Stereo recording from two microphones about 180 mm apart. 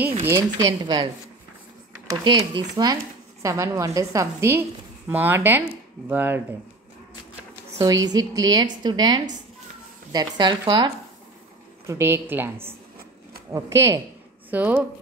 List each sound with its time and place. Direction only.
0.3 s speech: 20° right (ahead or behind)
2.0 s a woman's voice: 25° right (ahead or behind)
7.8 s speech: 20° right (ahead or behind)
11.9 s a woman's voice: 15° right (ahead or behind)